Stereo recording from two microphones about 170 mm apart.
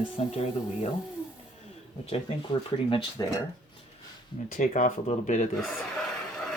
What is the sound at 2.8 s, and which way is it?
Speech, 30° left (ahead or behind).